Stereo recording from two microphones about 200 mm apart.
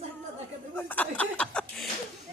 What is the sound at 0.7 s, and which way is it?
Speech, 10° left (ahead or behind).